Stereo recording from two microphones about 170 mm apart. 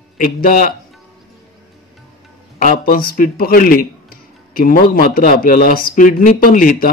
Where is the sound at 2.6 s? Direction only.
55° left (ahead or behind).